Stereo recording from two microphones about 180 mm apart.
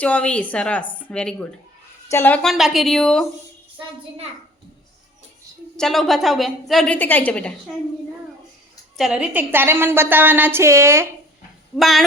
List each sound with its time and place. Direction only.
0.0 s a woman's voice: 5° left (ahead or behind)
5.7 s a woman's voice: centre (ahead or behind)
9.0 s a woman's voice: 5° right (ahead or behind)
11.8 s a woman's voice: centre (ahead or behind)